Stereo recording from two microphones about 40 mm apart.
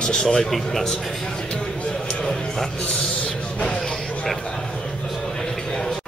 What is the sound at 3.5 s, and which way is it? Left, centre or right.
Music, left.